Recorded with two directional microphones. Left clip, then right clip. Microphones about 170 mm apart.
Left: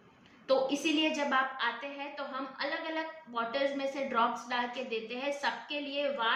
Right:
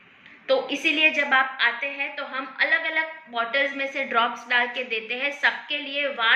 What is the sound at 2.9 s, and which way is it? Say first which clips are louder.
A woman's voice: right 10 dB; 30° left (ahead or behind).